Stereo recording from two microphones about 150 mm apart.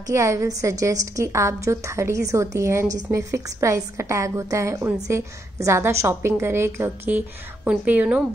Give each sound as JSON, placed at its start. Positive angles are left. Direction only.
{"t": 0.0, "sound": "a woman's voice", "side_deg": -20}